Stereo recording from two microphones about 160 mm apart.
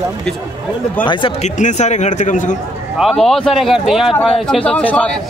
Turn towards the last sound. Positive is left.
turn(degrees=5)  # may be behind; listen again after turning